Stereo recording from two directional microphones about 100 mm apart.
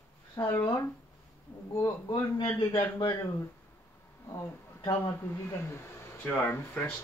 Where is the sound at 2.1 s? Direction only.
55° left (ahead or behind).